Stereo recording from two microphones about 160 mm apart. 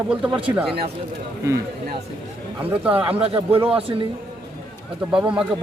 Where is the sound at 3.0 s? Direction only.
35° right (ahead or behind).